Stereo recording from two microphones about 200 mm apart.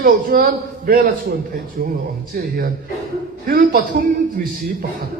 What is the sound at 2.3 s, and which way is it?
A man's voice, 45° right (ahead or behind).